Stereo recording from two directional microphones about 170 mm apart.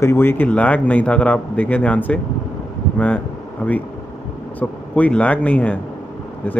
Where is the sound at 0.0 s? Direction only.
15° left (ahead or behind).